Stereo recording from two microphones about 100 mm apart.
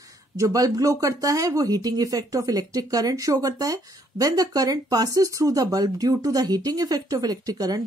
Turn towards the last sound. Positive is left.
turn(degrees=-40)  # may be behind; listen again after turning